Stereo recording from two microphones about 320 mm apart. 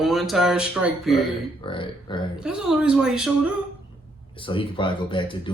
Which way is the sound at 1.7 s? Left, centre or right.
Centre.